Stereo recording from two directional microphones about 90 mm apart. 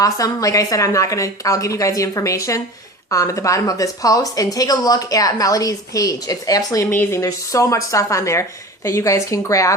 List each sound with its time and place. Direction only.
0.0 s a woman's voice: 40° left (ahead or behind)
6.9 s speech: 20° left (ahead or behind)
7.2 s a woman's voice: 35° left (ahead or behind)